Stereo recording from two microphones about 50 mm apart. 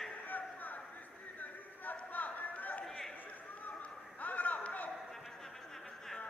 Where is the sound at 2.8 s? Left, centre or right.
Centre.